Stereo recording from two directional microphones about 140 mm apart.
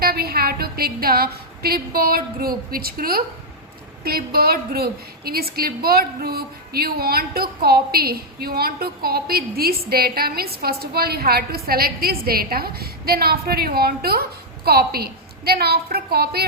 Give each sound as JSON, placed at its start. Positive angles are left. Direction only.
{"t": 0.0, "sound": "a woman's voice", "side_deg": -90}